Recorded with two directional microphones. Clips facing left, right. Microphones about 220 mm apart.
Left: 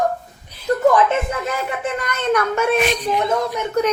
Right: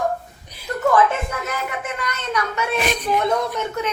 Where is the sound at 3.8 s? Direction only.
40° left (ahead or behind).